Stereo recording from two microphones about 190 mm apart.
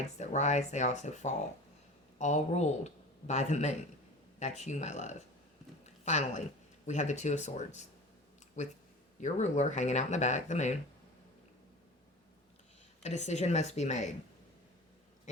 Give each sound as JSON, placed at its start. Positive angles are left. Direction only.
{"t": 0.2, "sound": "speech", "side_deg": 35}
{"t": 5.8, "sound": "a sound", "side_deg": 35}
{"t": 6.8, "sound": "speech", "side_deg": 40}
{"t": 9.2, "sound": "speech", "side_deg": 40}
{"t": 13.0, "sound": "speech", "side_deg": 35}